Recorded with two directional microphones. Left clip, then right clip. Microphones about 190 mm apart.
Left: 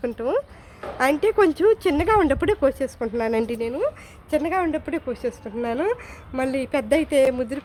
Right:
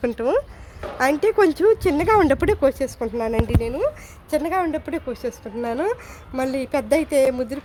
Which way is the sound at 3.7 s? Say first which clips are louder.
Right 2 dB; 10° right (ahead or behind).